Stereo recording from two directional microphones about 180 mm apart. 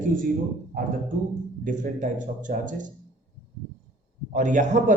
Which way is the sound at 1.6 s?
45° right (ahead or behind).